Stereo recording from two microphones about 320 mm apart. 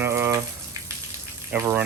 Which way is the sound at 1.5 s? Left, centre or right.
Centre.